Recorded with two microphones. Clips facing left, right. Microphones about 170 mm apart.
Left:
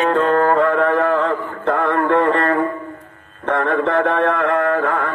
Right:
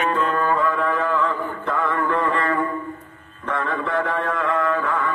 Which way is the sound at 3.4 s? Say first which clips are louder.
Left 7 dB; 55° left (ahead or behind).